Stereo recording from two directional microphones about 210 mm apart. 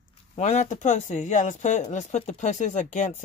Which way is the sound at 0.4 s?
35° left (ahead or behind).